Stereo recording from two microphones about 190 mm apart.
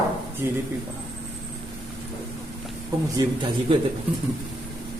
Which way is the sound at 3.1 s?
25° right (ahead or behind).